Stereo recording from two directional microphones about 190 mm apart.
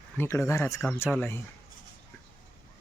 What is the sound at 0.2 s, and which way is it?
Speech, 15° left (ahead or behind).